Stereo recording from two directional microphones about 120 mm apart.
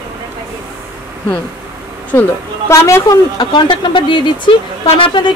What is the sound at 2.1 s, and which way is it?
Speech, 15° left (ahead or behind).